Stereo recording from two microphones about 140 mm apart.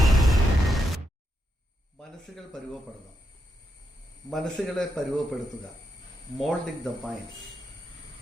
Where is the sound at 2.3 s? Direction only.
Centre (ahead or behind).